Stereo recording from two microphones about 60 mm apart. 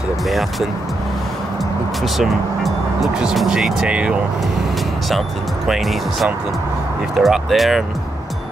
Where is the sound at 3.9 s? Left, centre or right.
Centre.